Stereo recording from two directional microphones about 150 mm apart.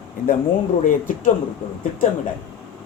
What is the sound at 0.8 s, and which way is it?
Speech, 60° left (ahead or behind).